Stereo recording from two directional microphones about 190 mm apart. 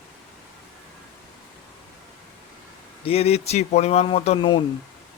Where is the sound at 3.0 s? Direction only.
30° left (ahead or behind).